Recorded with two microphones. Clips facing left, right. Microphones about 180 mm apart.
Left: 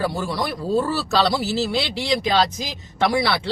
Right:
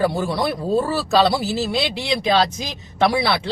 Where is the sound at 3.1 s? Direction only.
20° right (ahead or behind).